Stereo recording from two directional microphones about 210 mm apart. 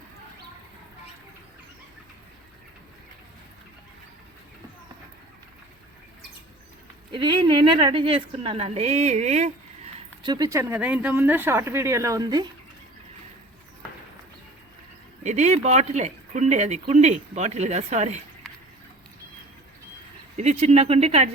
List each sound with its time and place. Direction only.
7.1 s speech: 25° right (ahead or behind)
10.2 s speech: 15° right (ahead or behind)
15.2 s speech: 35° right (ahead or behind)
20.3 s speech: 35° right (ahead or behind)